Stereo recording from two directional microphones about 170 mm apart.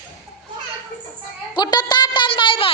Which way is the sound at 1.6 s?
25° left (ahead or behind).